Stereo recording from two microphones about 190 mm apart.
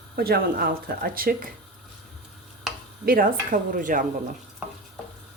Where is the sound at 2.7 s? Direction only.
Centre (ahead or behind).